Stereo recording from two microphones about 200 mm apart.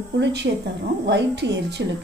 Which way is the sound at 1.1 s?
60° right (ahead or behind).